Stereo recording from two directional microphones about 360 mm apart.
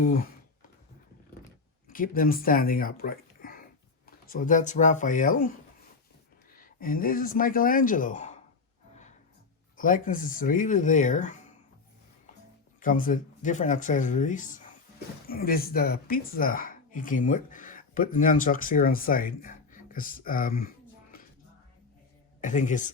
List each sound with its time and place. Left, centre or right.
0.0 s speech: left
1.9 s speech: left
6.5 s speech: left
9.7 s speech: left
12.8 s speech: left
22.4 s speech: left